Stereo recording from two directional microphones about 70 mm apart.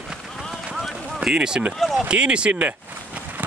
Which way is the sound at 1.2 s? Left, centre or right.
Centre.